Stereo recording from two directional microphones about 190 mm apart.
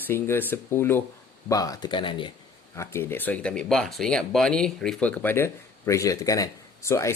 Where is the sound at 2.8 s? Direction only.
10° left (ahead or behind).